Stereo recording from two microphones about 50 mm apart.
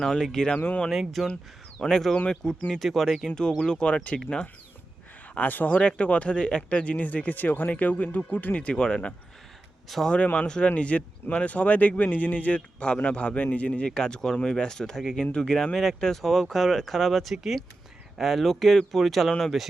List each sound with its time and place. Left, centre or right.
0.0 s speech: centre
0.9 s speech: centre
3.2 s speech: centre
5.5 s speech: left
5.7 s speech: left
8.7 s speech: centre
9.9 s speech: centre
10.3 s speech: centre
13.9 s speech: centre